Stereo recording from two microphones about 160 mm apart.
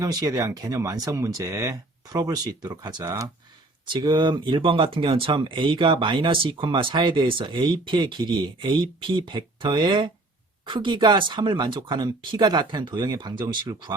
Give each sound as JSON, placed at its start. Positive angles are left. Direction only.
{"t": 0.0, "sound": "speech", "side_deg": -20}
{"t": 3.9, "sound": "speech", "side_deg": -30}